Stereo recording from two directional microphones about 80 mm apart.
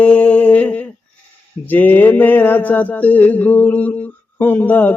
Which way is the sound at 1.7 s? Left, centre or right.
Left.